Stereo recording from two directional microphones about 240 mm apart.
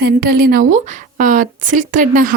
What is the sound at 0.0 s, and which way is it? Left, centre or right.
A woman's voice, right.